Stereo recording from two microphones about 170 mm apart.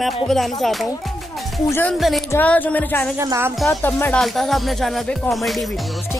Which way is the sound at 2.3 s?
10° left (ahead or behind).